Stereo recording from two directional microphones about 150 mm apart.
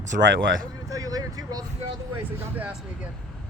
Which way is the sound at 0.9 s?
25° right (ahead or behind).